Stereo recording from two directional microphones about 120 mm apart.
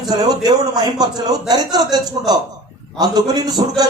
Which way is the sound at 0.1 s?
35° right (ahead or behind).